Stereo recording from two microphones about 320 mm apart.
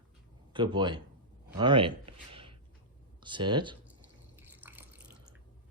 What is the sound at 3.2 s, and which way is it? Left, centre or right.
Speech, centre.